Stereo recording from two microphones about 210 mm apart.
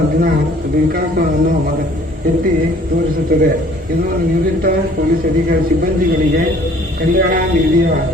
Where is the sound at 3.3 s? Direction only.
40° right (ahead or behind).